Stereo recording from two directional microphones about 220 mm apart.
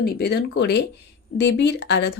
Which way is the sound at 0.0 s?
45° left (ahead or behind).